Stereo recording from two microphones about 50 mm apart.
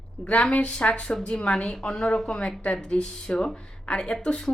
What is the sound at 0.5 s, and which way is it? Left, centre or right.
Speech, left.